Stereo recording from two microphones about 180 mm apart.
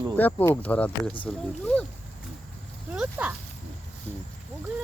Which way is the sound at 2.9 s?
10° right (ahead or behind).